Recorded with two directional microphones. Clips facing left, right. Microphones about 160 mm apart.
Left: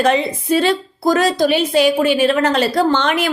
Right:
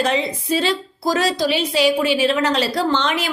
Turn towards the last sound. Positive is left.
turn(degrees=55)  # may be behind; listen again after turning